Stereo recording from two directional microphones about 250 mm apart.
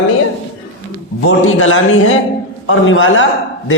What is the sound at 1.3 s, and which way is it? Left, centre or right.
A man's voice, left.